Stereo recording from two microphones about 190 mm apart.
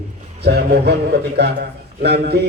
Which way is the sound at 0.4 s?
60° right (ahead or behind).